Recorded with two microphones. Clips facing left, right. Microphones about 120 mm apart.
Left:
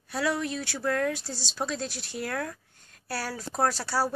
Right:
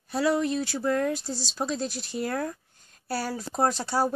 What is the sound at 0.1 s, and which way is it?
Speech, 35° right (ahead or behind).